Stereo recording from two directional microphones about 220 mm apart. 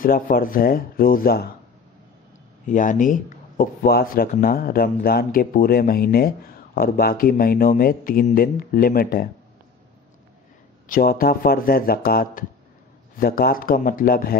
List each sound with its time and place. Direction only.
0.0 s speech: 40° left (ahead or behind)
2.6 s speech: 35° left (ahead or behind)
10.9 s speech: 40° left (ahead or behind)